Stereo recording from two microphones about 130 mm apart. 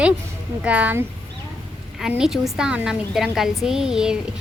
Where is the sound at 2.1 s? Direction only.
5° right (ahead or behind).